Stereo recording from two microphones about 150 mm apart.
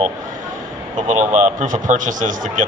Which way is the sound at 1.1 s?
55° right (ahead or behind).